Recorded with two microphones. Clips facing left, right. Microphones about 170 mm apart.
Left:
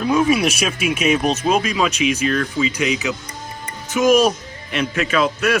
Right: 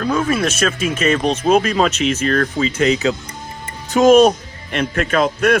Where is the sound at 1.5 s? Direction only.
45° right (ahead or behind).